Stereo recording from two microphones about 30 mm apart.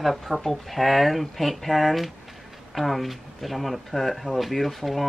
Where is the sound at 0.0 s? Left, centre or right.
Centre.